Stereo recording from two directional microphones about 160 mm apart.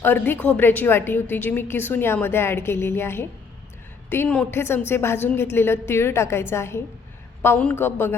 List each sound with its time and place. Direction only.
0.0 s a woman's voice: 10° left (ahead or behind)